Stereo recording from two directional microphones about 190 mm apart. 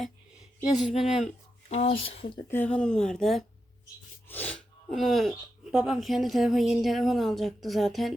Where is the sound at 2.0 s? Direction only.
30° left (ahead or behind).